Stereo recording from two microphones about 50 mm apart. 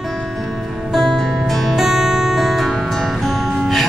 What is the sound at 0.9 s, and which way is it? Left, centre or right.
Music, centre.